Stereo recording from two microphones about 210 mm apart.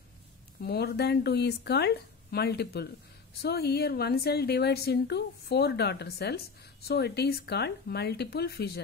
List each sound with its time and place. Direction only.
0.6 s a woman's voice: 50° left (ahead or behind)